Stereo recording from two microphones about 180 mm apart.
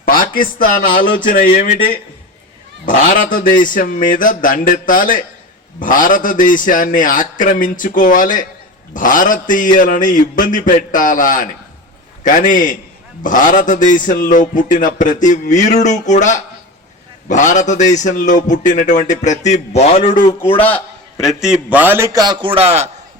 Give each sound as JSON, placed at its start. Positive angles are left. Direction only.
{"t": 0.0, "sound": "a man's voice", "side_deg": 50}
{"t": 20.1, "sound": "a man's voice", "side_deg": 25}
{"t": 20.6, "sound": "a man's voice", "side_deg": 10}